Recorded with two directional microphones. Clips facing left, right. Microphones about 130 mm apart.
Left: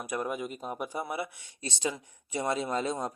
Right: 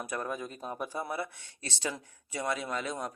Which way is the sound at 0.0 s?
15° left (ahead or behind).